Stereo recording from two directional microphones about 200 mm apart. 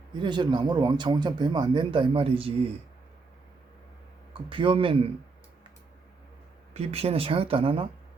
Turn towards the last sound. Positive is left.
turn(degrees=-25)  # may be behind; listen again after turning